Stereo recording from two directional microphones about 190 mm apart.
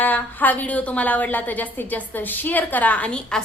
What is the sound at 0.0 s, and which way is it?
A woman's voice, 10° left (ahead or behind).